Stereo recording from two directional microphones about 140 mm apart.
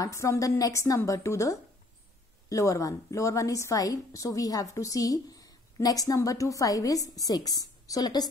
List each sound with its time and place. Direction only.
0.0 s a woman's voice: 20° left (ahead or behind)